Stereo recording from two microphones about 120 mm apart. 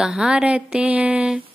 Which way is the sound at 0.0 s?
5° right (ahead or behind).